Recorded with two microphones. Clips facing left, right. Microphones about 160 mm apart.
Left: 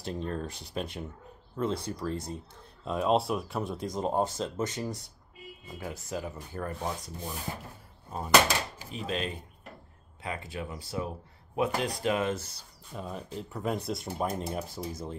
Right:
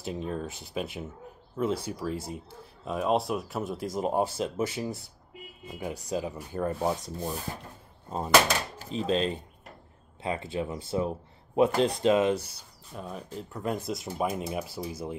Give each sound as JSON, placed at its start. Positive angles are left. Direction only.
{"t": 0.0, "sound": "speech", "side_deg": -5}
{"t": 5.8, "sound": "rub", "side_deg": -15}
{"t": 8.9, "sound": "rub", "side_deg": -30}
{"t": 12.9, "sound": "speech", "side_deg": 0}